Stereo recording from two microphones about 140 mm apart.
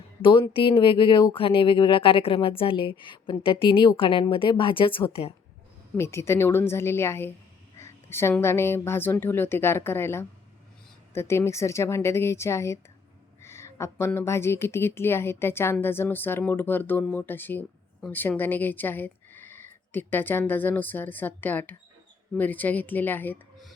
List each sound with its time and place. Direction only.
0.2 s speech: 35° left (ahead or behind)
6.0 s a woman's voice: 20° left (ahead or behind)